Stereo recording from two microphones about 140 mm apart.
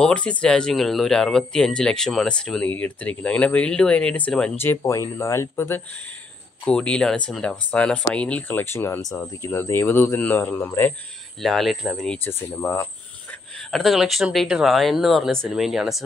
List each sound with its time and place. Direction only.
0.0 s speech: 10° left (ahead or behind)
6.6 s speech: 5° left (ahead or behind)
11.4 s speech: centre (ahead or behind)
12.1 s speech: 15° left (ahead or behind)
13.7 s speech: centre (ahead or behind)